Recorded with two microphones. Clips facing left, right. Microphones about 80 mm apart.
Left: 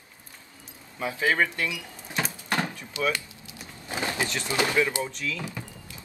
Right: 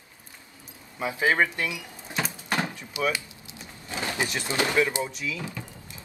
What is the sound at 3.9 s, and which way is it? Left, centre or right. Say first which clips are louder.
Vehicle: left 1 dB; left.